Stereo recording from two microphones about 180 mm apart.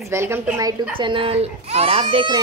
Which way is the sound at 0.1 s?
15° right (ahead or behind).